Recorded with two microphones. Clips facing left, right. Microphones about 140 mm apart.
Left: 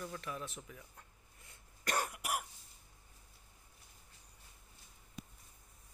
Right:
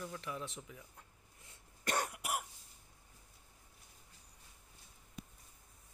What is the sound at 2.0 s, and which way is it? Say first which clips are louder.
Throat clearing: even; 25° right (ahead or behind).